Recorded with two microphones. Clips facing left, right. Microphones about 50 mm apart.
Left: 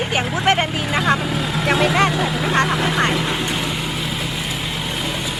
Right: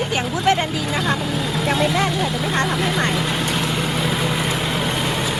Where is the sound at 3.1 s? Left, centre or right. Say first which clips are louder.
Even; centre.